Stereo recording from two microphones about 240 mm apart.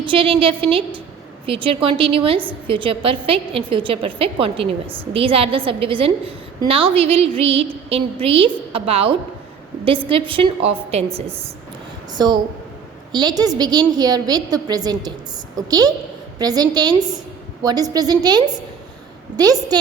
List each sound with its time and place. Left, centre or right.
0.0 s a woman's voice: right